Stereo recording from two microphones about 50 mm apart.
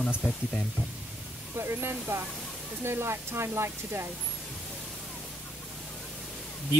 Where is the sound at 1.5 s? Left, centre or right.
Right.